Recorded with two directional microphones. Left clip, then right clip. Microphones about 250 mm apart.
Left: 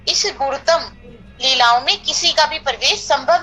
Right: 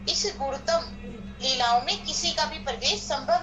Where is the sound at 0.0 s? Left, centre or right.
Left.